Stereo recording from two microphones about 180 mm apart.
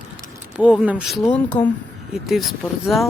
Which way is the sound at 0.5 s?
5° right (ahead or behind).